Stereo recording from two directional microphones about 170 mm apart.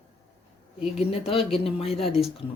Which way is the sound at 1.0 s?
35° left (ahead or behind).